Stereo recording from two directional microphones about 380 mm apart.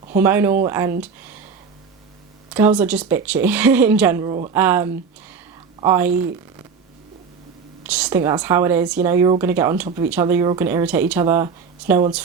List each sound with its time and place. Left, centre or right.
0.2 s a woman's voice: centre
2.5 s speech: centre
7.9 s a woman's voice: centre